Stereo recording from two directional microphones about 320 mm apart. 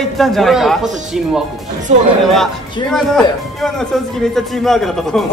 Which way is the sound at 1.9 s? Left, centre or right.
Right.